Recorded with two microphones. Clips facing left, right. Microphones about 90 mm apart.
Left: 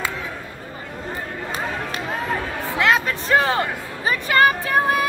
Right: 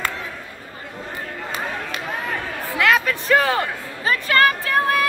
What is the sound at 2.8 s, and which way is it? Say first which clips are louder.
Speech: right 1 dB; 30° left (ahead or behind).